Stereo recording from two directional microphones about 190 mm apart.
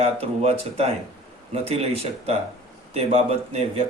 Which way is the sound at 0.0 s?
30° right (ahead or behind).